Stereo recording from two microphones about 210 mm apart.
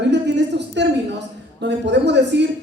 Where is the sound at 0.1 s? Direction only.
55° right (ahead or behind).